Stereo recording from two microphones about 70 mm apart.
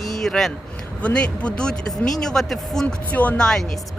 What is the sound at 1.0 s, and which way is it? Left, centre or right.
Speech, centre.